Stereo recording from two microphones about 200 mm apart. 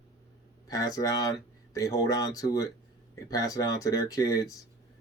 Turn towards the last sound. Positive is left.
turn(degrees=15)  # may be behind; listen again after turning